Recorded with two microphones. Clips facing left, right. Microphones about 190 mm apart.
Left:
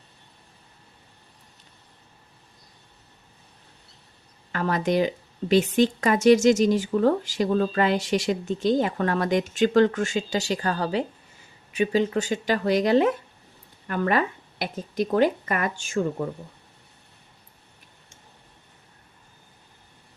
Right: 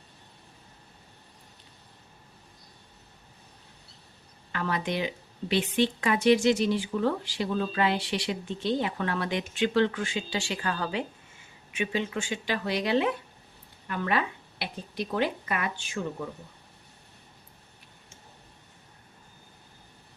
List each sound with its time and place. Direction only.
4.5 s speech: 45° left (ahead or behind)